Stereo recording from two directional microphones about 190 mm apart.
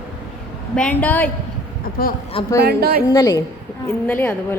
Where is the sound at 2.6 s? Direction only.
55° right (ahead or behind).